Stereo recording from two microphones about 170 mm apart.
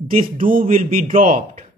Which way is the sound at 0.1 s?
55° right (ahead or behind).